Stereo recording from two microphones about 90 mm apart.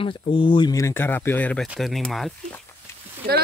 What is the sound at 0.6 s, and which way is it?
Speech, 35° left (ahead or behind).